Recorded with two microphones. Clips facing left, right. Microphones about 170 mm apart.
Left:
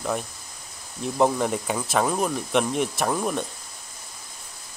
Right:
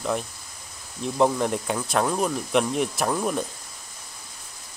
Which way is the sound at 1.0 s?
Centre (ahead or behind).